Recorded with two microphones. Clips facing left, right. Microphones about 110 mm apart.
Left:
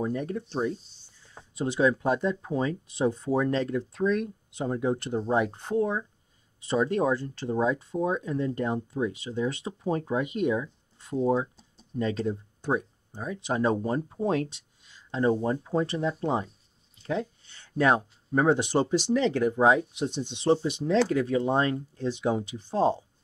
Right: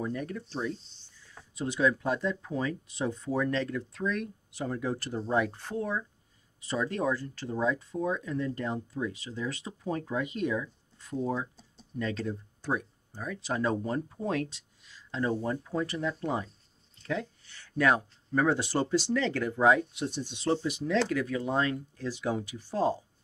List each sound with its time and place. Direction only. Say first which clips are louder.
0.0 s speech: left 4 dB; 25° left (ahead or behind)